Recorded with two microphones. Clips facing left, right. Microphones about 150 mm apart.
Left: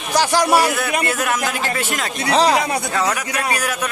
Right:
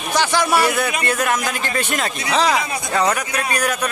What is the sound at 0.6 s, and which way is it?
Speech, centre (ahead or behind).